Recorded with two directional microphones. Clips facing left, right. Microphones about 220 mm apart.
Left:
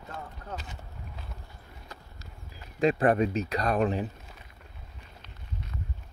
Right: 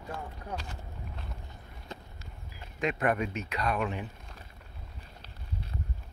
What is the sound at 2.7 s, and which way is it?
Speech, 35° left (ahead or behind).